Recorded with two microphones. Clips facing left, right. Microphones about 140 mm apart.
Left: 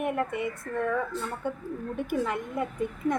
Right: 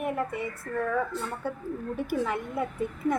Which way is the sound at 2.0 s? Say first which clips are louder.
Even; 5° right (ahead or behind).